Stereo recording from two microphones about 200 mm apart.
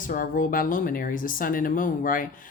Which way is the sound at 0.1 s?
45° left (ahead or behind).